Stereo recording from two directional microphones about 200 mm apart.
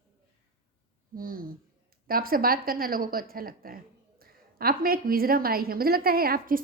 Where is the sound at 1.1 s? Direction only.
45° right (ahead or behind).